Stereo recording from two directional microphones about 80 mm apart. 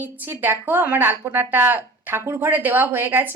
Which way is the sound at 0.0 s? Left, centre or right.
Right.